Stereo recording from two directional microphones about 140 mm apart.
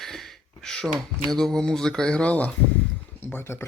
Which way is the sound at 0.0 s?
Centre (ahead or behind).